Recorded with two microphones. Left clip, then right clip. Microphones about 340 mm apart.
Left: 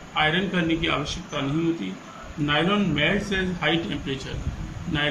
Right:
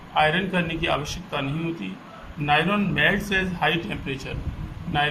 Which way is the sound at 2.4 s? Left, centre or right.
Centre.